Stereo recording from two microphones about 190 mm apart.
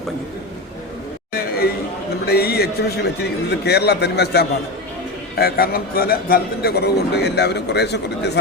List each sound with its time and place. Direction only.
2.2 s a man's voice: 55° left (ahead or behind)